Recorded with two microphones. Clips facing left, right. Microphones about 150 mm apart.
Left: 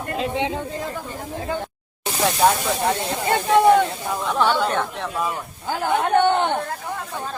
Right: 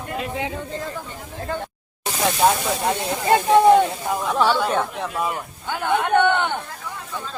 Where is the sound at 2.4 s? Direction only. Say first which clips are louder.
Even; 5° right (ahead or behind).